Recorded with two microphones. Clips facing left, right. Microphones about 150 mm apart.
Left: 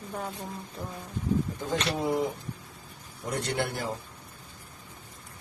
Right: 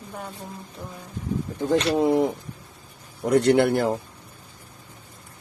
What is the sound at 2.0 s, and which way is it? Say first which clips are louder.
Speech: right 8 dB; 65° right (ahead or behind).